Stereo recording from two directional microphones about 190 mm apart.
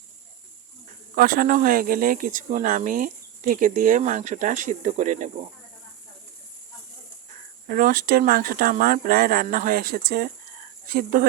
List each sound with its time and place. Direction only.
1.1 s speech: 50° right (ahead or behind)
7.7 s speech: 45° right (ahead or behind)